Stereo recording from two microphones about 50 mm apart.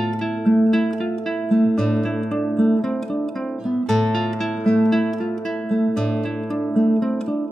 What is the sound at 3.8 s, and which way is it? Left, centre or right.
Music, centre.